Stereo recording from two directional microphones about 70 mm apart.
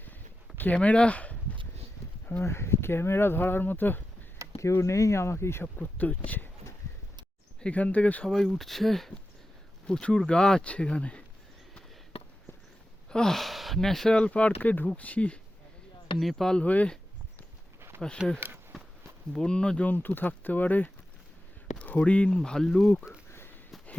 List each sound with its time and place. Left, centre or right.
0.5 s speech: left
2.4 s speech: left
4.5 s speech: left
5.8 s speech: left
7.6 s speech: centre
8.3 s speech: centre
13.1 s speech: centre
16.1 s speech: centre
16.6 s speech: left
17.7 s a sound: right
18.3 s speech: right
19.3 s speech: centre